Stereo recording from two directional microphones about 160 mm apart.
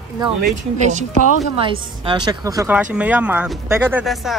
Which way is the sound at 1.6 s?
30° right (ahead or behind).